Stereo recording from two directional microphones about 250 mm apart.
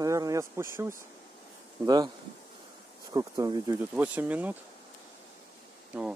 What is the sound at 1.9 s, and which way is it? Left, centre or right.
Speech, centre.